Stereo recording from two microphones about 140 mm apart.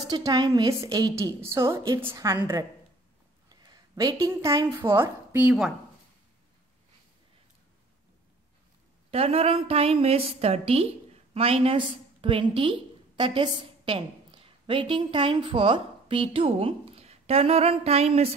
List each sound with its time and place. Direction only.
0.1 s a woman's voice: 30° right (ahead or behind)
3.4 s a sound: 30° right (ahead or behind)
4.9 s a woman's voice: 15° right (ahead or behind)
9.1 s a woman's voice: 45° right (ahead or behind)